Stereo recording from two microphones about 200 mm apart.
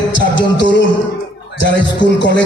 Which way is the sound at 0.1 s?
65° left (ahead or behind).